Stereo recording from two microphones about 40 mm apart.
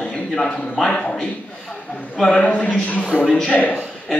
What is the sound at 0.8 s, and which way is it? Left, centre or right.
Speech, centre.